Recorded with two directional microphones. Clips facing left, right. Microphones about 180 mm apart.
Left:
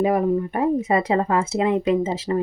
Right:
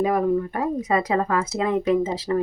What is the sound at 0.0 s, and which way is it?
Speech, 20° left (ahead or behind).